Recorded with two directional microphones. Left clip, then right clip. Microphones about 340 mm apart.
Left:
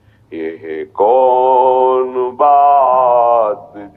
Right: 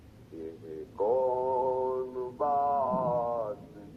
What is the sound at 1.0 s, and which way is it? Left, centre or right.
Mantra, left.